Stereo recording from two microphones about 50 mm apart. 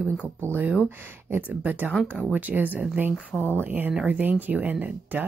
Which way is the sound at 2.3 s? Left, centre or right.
Right.